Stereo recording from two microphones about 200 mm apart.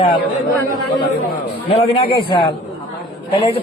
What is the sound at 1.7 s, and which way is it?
Speech, 30° left (ahead or behind).